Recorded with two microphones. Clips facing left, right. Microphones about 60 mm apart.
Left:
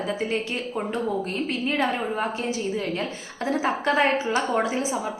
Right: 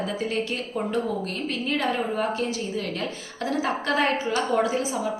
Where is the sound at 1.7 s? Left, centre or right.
Left.